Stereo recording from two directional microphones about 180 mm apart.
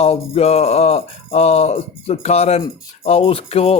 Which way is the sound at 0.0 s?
35° left (ahead or behind).